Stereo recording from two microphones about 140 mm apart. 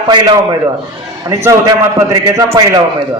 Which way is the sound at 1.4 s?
20° right (ahead or behind).